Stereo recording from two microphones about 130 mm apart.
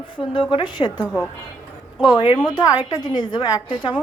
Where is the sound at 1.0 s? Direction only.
10° left (ahead or behind).